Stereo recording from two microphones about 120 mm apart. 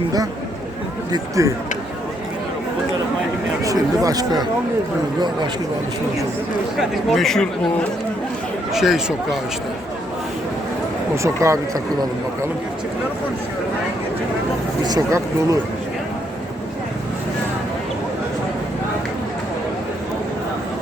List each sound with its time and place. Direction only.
1.1 s speech: 25° right (ahead or behind)
3.6 s speech: 30° right (ahead or behind)
6.7 s speech: centre (ahead or behind)
8.7 s speech: 5° right (ahead or behind)
11.1 s speech: 25° right (ahead or behind)
14.8 s speech: 30° right (ahead or behind)